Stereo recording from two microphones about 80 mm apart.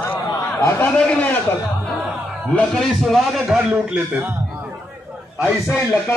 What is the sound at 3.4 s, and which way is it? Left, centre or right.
Speech, centre.